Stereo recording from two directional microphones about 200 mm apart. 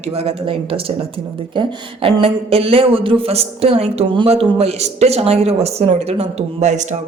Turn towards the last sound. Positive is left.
turn(degrees=-35)  # may be behind; listen again after turning